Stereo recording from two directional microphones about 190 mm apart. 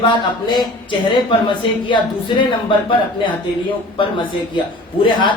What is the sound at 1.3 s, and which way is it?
A man's voice, 25° left (ahead or behind).